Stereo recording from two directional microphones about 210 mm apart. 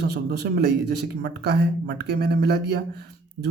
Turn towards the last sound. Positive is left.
turn(degrees=-50)  # may be behind; listen again after turning